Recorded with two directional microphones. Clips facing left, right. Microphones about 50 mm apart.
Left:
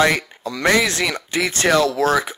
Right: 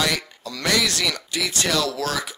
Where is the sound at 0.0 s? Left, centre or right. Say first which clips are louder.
Left 7 dB; left.